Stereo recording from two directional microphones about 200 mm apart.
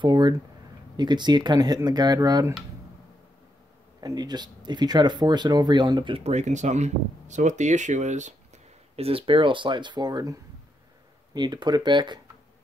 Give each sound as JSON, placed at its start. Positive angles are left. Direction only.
{"t": 0.0, "sound": "speech", "side_deg": -20}
{"t": 4.0, "sound": "speech", "side_deg": -20}